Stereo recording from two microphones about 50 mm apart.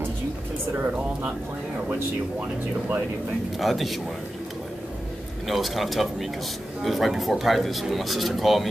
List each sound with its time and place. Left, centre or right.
0.7 s speech: right
3.5 s speech: centre
5.5 s speech: centre